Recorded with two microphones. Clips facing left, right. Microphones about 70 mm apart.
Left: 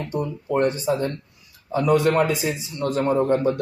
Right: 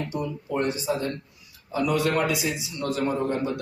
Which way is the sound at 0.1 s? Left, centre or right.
Left.